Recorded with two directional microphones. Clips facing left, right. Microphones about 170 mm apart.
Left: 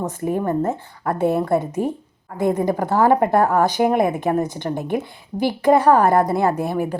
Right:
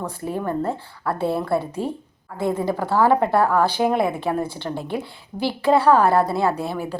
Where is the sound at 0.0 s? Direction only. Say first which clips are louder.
Left 4 dB; 20° left (ahead or behind).